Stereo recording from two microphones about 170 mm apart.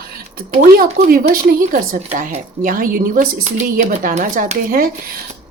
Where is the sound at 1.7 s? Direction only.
50° right (ahead or behind).